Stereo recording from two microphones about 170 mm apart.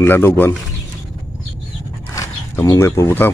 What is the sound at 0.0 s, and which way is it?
Speech, 15° left (ahead or behind).